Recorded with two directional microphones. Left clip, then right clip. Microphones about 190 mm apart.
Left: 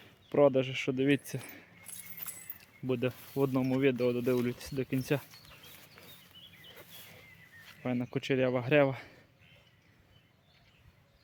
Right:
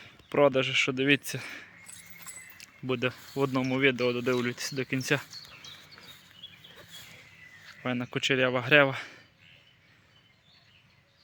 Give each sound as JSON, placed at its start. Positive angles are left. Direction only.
{"t": 0.3, "sound": "speech", "side_deg": 5}
{"t": 7.9, "sound": "speech", "side_deg": 5}